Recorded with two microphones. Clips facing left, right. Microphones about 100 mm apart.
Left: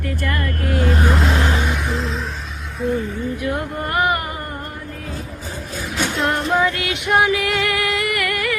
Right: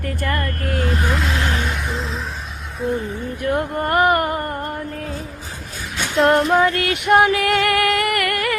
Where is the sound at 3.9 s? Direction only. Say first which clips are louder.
Right 4 dB; 55° right (ahead or behind).